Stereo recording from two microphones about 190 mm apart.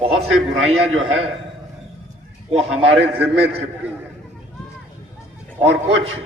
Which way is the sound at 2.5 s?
30° right (ahead or behind).